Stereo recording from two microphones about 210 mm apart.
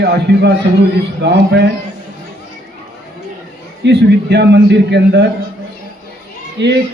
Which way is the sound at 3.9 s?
55° right (ahead or behind).